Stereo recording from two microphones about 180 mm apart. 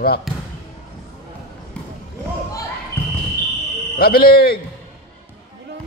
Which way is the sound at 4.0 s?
55° left (ahead or behind).